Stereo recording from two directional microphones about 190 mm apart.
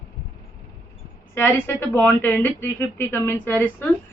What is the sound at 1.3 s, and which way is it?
A woman's voice, 10° left (ahead or behind).